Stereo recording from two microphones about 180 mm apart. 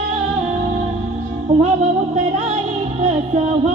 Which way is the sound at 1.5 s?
35° right (ahead or behind).